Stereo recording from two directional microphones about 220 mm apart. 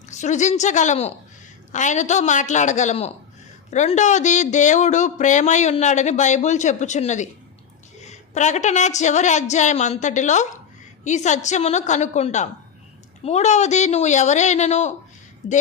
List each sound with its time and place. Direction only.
0.1 s speech: 30° left (ahead or behind)